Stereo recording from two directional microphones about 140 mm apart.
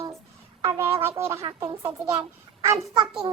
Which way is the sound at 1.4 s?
35° right (ahead or behind).